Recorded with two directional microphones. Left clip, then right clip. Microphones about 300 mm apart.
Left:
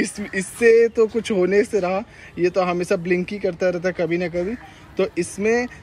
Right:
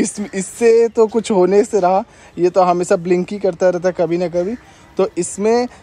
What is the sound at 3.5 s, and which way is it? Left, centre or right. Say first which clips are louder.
Speech: right 7 dB; centre.